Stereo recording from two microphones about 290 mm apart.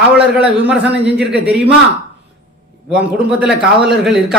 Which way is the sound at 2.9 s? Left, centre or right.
Centre.